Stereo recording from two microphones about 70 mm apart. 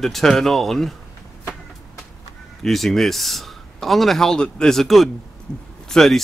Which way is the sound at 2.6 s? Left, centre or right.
Centre.